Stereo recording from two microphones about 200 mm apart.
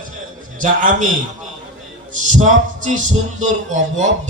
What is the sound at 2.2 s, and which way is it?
Speech, 40° right (ahead or behind).